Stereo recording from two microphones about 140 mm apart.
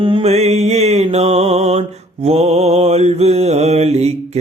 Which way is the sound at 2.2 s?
50° right (ahead or behind).